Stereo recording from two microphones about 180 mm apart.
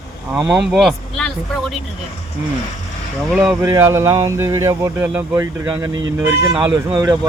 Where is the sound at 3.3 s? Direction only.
5° right (ahead or behind).